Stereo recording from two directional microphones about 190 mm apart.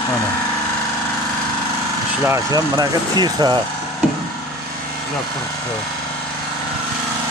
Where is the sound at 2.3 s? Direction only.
20° right (ahead or behind).